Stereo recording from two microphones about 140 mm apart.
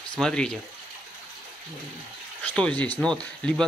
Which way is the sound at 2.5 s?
10° left (ahead or behind).